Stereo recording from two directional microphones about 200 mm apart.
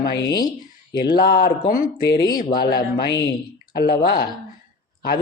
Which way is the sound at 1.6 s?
45° left (ahead or behind).